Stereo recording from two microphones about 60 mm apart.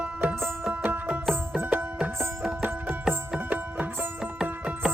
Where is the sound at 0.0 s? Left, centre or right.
Right.